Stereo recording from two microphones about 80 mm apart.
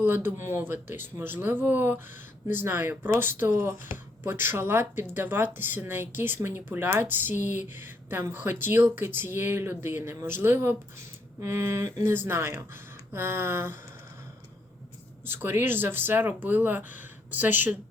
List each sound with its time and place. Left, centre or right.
0.0 s speech: right
15.3 s speech: right